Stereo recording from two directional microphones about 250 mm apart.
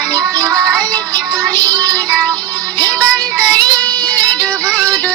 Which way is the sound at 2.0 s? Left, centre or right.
Centre.